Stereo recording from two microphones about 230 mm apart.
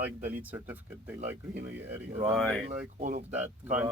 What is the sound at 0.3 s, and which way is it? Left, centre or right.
Speech, centre.